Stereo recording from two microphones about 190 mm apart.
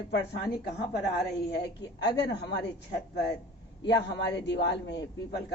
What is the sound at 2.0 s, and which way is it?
Speech, 65° left (ahead or behind).